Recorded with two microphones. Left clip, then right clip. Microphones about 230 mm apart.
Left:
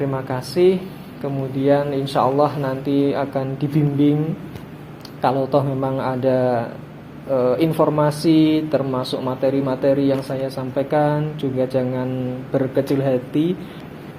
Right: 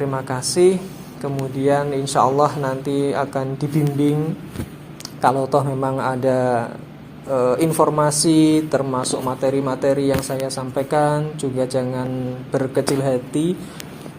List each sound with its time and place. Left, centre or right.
0.0 s speech: right
5.2 s speech: right